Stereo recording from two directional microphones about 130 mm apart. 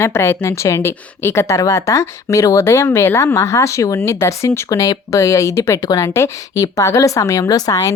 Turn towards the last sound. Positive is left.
turn(degrees=25)  # may be behind; listen again after turning